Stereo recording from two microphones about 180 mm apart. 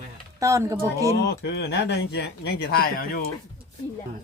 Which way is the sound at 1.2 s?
65° left (ahead or behind).